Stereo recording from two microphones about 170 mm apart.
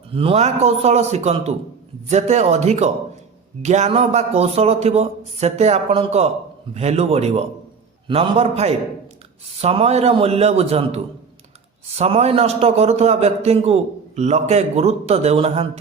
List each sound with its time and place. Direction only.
0.1 s a man's voice: 35° right (ahead or behind)